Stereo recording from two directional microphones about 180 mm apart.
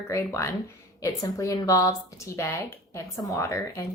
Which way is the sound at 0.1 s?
15° left (ahead or behind).